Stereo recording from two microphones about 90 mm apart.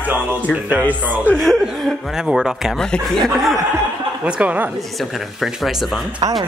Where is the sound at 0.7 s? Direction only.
20° right (ahead or behind).